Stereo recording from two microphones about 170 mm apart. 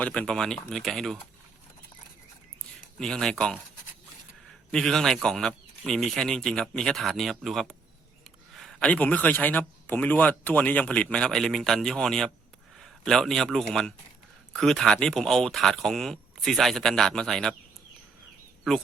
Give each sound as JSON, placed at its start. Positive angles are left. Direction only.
{"t": 0.0, "sound": "speech", "side_deg": 5}
{"t": 3.0, "sound": "speech", "side_deg": 5}
{"t": 4.7, "sound": "a man's voice", "side_deg": 5}